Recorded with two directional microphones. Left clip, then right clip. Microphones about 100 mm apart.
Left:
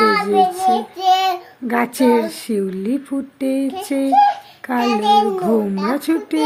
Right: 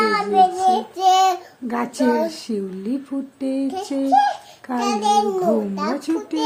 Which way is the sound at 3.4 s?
15° left (ahead or behind).